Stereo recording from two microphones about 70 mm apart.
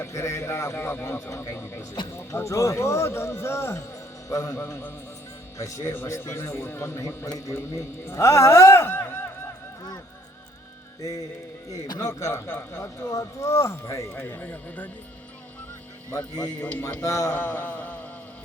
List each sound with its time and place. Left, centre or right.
0.1 s speech: left
5.5 s speech: left
7.3 s a man's voice: left
11.0 s speech: left
12.5 s speech: left
13.1 s speech: left
14.3 s speech: left
16.1 s speech: left
16.6 s speech: left
17.0 s speech: left
17.3 s mantra: left